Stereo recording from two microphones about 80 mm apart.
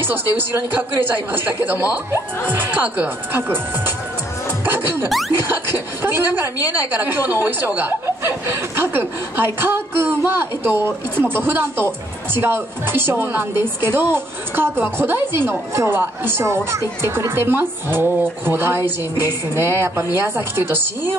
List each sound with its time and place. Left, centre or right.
0.0 s a woman's voice: right